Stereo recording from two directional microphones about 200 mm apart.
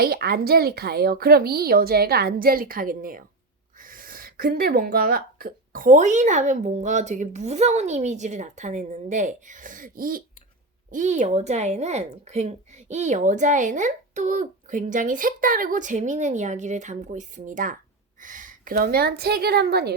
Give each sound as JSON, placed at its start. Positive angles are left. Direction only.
{"t": 0.0, "sound": "a woman's voice", "side_deg": -50}